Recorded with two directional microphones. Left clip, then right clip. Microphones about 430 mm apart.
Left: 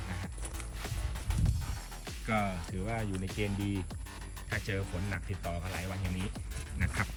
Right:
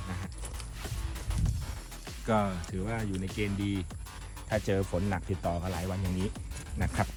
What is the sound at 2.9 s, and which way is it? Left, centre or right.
Speech, centre.